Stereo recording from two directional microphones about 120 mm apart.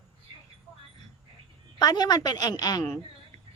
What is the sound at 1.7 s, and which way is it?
A woman's voice, 35° left (ahead or behind).